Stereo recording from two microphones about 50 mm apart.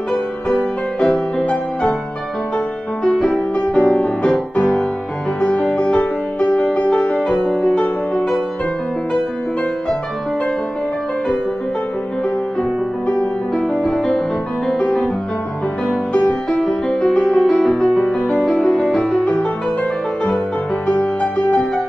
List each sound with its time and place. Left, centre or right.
0.9 s music: centre
1.4 s music: left
3.0 s music: centre
5.4 s music: centre
7.2 s music: centre
13.0 s music: centre
16.1 s music: left
16.4 s music: centre
19.0 s music: centre
20.8 s music: centre
21.2 s music: centre